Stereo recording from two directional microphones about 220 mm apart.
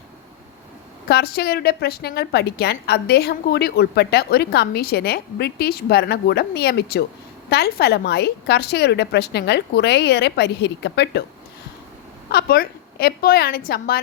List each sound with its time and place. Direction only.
1.0 s a woman's voice: 45° left (ahead or behind)
12.3 s a woman's voice: 45° left (ahead or behind)